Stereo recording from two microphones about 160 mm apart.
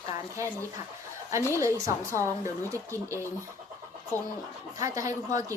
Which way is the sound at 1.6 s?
20° right (ahead or behind).